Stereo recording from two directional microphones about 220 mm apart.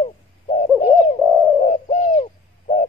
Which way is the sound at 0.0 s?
30° left (ahead or behind).